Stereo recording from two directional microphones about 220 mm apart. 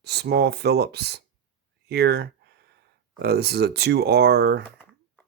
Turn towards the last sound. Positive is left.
turn(degrees=-50)  # may be behind; listen again after turning